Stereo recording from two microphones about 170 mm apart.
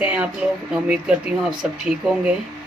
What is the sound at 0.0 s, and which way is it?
Speech, 10° right (ahead or behind).